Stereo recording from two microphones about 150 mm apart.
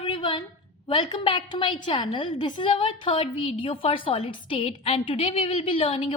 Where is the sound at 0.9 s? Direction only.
30° left (ahead or behind).